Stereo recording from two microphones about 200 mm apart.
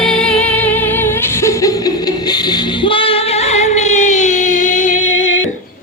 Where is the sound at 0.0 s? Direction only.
Centre (ahead or behind); by 5.3 s 40° left (ahead or behind).